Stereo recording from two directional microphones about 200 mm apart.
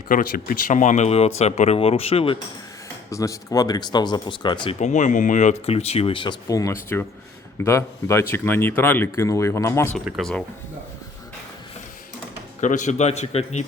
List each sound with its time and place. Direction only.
0.1 s speech: 45° left (ahead or behind); by 2.4 s 30° left (ahead or behind)
3.1 s speech: 15° left (ahead or behind)
4.8 s speech: 35° left (ahead or behind); by 10.0 s 15° left (ahead or behind)
10.1 s speech: centre (ahead or behind)
12.5 s speech: 35° left (ahead or behind)